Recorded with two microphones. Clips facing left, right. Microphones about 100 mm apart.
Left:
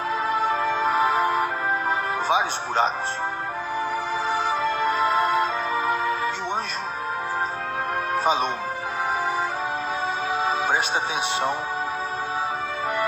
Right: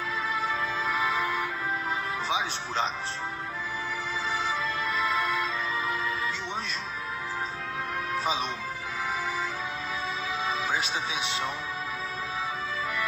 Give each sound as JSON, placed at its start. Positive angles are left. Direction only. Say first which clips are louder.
{"t": 0.3, "sound": "music", "louder": "left 8 dB", "side_deg": 55}
{"t": 4.3, "sound": "music", "louder": "left 7 dB", "side_deg": 55}
{"t": 8.1, "sound": "music", "louder": "left 7 dB", "side_deg": 55}
{"t": 10.4, "sound": "music", "louder": "left 6 dB", "side_deg": 55}